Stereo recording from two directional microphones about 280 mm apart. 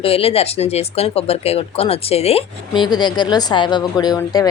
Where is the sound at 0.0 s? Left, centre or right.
Left.